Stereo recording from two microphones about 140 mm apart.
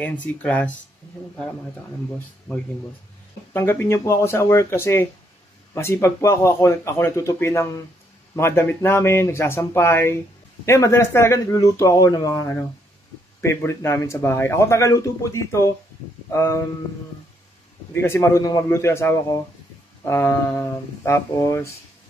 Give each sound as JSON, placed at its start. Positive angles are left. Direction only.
{"t": 0.0, "sound": "speech", "side_deg": 10}
{"t": 2.1, "sound": "a man's voice", "side_deg": 15}
{"t": 18.0, "sound": "a man's voice", "side_deg": 20}